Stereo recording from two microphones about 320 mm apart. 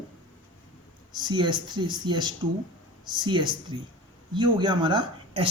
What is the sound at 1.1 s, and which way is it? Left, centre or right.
Speech, centre.